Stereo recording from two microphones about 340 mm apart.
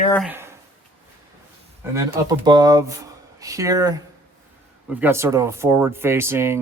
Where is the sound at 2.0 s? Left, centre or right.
Centre.